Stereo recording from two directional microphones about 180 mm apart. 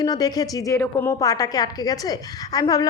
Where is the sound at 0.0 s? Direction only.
20° left (ahead or behind).